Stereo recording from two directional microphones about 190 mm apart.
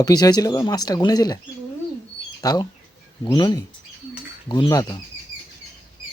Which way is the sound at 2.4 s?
20° left (ahead or behind).